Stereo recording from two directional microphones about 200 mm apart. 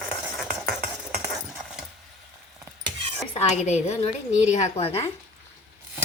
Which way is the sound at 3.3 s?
30° left (ahead or behind).